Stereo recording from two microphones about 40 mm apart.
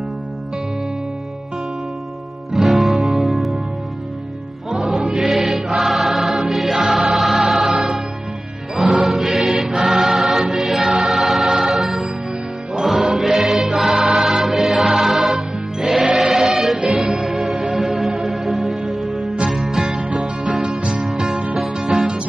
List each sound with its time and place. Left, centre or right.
2.5 s music: centre
4.6 s music: centre
8.7 s music: centre
20.7 s music: right
21.0 s music: centre